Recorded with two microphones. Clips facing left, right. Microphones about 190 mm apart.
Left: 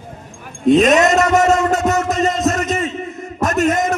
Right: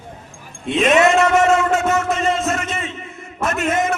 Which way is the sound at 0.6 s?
40° left (ahead or behind).